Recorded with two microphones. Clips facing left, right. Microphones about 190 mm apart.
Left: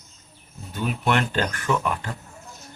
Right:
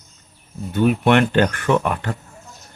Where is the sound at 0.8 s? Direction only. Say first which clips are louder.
Right 8 dB; 65° right (ahead or behind).